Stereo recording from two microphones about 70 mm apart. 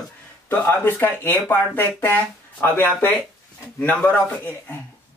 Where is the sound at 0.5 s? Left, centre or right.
Left.